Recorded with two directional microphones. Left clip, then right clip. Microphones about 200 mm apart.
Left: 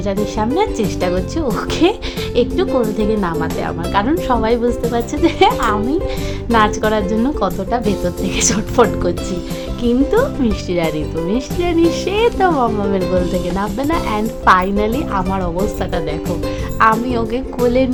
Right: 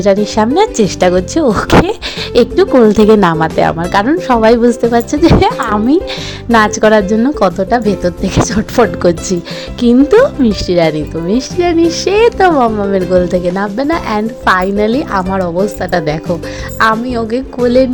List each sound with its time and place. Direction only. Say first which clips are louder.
0.0 s a woman's voice: right 9 dB; 35° right (ahead or behind)
16.8 s a woman's voice: right 2 dB; 20° right (ahead or behind)